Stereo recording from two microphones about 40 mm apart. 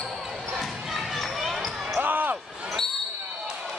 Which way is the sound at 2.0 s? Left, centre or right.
Right.